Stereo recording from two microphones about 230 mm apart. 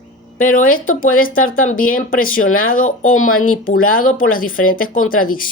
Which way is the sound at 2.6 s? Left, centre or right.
Left.